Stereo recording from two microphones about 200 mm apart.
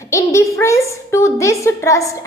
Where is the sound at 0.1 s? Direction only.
15° left (ahead or behind).